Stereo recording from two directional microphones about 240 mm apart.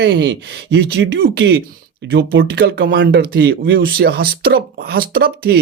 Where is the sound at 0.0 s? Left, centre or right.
Right.